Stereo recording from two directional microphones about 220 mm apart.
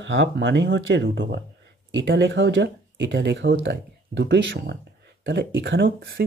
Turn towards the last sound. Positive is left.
turn(degrees=-50)  # may be behind; listen again after turning